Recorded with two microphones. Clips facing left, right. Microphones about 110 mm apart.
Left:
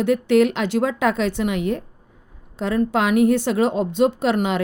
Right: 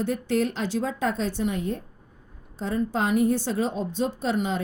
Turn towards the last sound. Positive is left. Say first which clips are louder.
# left 6 dB
turn(degrees=75)  # may be behind; listen again after turning